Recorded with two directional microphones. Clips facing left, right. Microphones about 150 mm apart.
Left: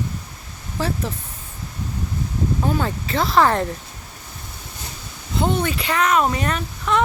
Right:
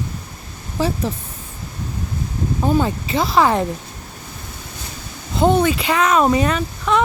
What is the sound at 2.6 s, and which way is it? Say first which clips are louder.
Speech: right 9 dB; 15° right (ahead or behind).